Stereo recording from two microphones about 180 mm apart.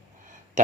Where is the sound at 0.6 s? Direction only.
45° right (ahead or behind).